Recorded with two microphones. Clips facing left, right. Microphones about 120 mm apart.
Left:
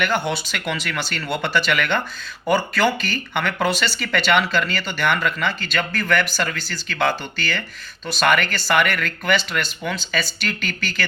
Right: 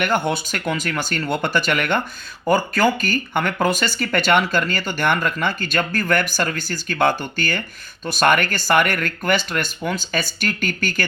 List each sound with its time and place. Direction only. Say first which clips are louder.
0.0 s speech: right 2 dB; 50° right (ahead or behind)